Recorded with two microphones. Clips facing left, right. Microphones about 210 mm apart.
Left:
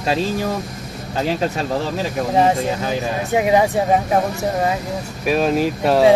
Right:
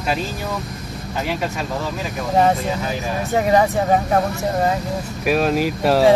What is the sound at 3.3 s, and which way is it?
Speech, 10° left (ahead or behind).